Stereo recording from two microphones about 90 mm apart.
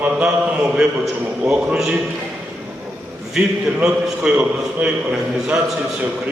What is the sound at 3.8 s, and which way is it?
A man's voice, 10° right (ahead or behind).